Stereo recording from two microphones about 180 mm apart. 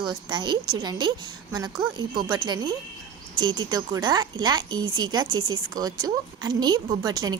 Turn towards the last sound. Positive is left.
turn(degrees=-20)  # may be behind; listen again after turning